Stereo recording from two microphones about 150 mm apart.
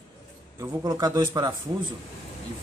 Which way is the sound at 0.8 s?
25° right (ahead or behind).